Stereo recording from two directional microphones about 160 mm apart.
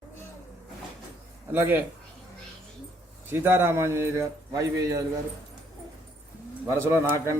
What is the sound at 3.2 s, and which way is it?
A man's voice, 15° right (ahead or behind).